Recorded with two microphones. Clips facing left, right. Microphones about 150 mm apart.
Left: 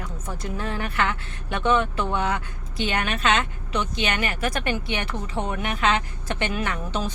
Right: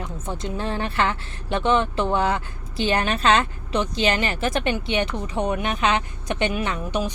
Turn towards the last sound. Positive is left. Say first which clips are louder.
# right 2 dB
turn(degrees=-15)  # may be behind; listen again after turning